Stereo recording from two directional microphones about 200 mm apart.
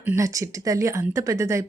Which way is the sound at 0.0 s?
10° right (ahead or behind).